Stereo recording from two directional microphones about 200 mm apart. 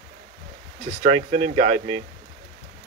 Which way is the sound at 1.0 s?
30° right (ahead or behind).